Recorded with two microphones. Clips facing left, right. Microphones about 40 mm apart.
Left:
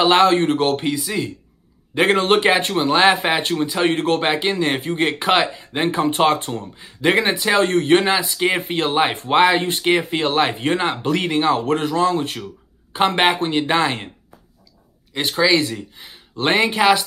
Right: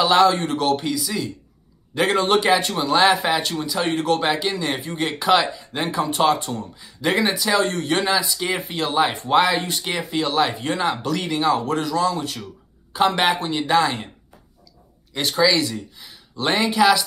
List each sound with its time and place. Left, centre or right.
0.0 s speech: left
15.1 s speech: left
15.5 s speech: left